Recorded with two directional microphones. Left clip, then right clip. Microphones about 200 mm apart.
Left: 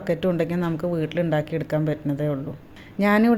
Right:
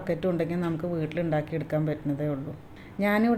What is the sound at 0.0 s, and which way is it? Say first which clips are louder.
Speech: left 5 dB; 25° left (ahead or behind).